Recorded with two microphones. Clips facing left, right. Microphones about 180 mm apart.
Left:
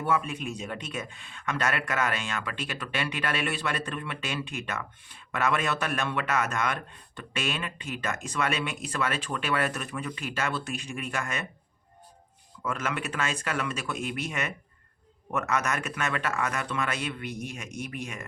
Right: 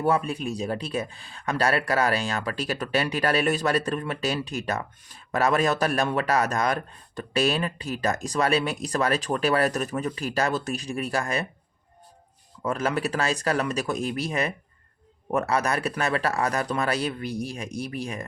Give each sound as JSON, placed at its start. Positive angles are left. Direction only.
{"t": 0.0, "sound": "speech", "side_deg": -35}
{"t": 12.6, "sound": "speech", "side_deg": -35}